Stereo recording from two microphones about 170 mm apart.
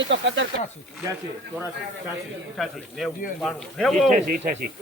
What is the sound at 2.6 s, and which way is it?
Speech, centre (ahead or behind).